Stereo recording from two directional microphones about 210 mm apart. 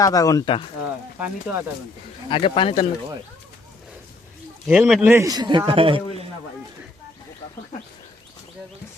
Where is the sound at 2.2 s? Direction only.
25° left (ahead or behind).